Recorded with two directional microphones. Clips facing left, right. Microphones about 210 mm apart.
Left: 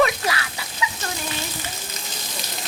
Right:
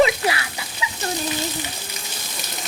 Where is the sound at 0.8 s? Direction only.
25° right (ahead or behind).